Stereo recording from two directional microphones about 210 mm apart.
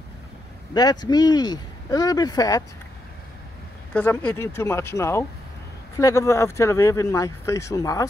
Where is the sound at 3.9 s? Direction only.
10° left (ahead or behind).